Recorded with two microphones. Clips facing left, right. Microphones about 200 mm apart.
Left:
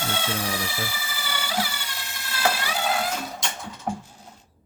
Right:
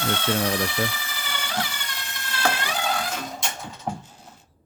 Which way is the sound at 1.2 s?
10° left (ahead or behind).